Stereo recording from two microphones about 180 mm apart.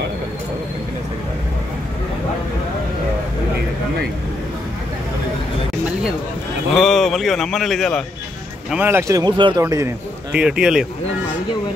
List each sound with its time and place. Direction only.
6.7 s a man's voice: centre (ahead or behind)
8.6 s a man's voice: 10° right (ahead or behind)
10.3 s a man's voice: 5° right (ahead or behind)